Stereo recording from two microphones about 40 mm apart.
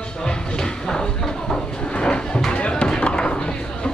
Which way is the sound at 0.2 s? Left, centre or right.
Centre.